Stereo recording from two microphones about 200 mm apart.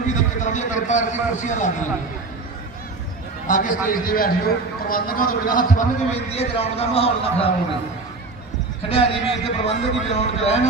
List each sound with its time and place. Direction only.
0.1 s a man's voice: 35° left (ahead or behind)
3.4 s a man's voice: 40° left (ahead or behind)
8.9 s a man's voice: 30° left (ahead or behind)